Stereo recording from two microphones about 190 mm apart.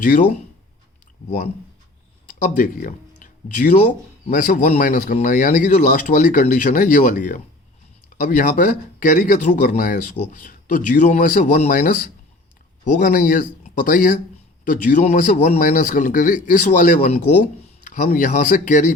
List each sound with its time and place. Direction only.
0.0 s speech: 40° left (ahead or behind)
2.4 s a man's voice: 45° left (ahead or behind)
3.2 s a sound: 40° left (ahead or behind)
4.3 s a man's voice: 40° left (ahead or behind)